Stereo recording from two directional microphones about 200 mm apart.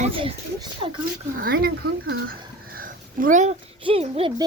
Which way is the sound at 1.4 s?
50° right (ahead or behind).